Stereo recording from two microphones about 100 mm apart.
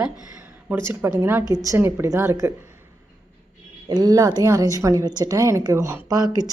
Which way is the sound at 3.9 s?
40° right (ahead or behind).